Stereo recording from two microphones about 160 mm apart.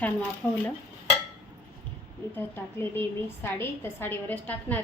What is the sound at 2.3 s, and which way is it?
A woman's voice, 15° left (ahead or behind).